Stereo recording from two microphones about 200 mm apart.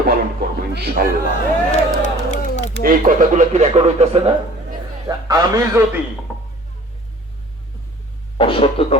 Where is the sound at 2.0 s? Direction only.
35° left (ahead or behind).